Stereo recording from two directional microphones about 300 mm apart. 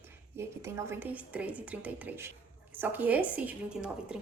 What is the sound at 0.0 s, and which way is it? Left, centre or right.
A woman's voice, centre.